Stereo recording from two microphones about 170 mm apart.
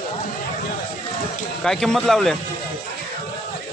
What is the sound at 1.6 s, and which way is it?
Speech, 5° left (ahead or behind).